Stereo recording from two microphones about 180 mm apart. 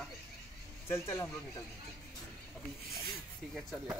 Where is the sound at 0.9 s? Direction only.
15° left (ahead or behind).